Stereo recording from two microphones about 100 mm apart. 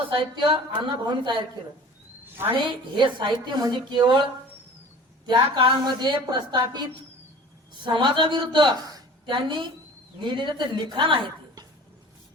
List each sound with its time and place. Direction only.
0.1 s a woman's voice: 55° right (ahead or behind)
2.5 s a woman's voice: 50° right (ahead or behind)
5.2 s a woman's voice: 50° right (ahead or behind)
7.9 s a woman's voice: 55° right (ahead or behind)
9.3 s a woman's voice: 55° right (ahead or behind)